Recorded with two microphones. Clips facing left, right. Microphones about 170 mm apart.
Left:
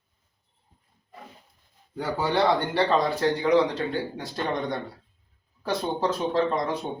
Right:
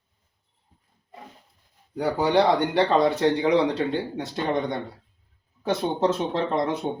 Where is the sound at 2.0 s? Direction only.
15° right (ahead or behind).